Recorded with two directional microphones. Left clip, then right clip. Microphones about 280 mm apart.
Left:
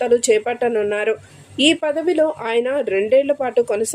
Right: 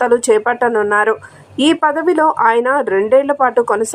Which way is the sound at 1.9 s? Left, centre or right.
Centre.